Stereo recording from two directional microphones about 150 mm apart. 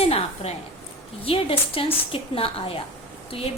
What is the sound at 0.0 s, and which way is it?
A woman's voice, 40° left (ahead or behind).